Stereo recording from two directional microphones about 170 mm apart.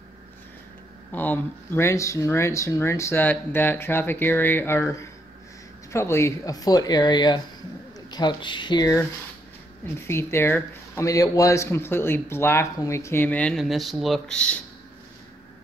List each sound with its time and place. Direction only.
1.1 s speech: 10° left (ahead or behind)